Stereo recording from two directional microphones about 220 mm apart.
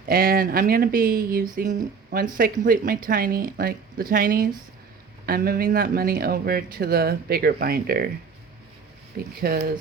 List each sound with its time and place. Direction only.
0.0 s speech: 40° right (ahead or behind)
9.1 s speech: 45° right (ahead or behind)